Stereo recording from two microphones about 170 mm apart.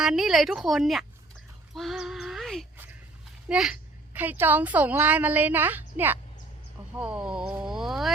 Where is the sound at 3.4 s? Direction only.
5° right (ahead or behind).